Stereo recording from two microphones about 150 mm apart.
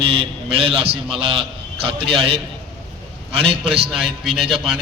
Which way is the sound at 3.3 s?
40° right (ahead or behind).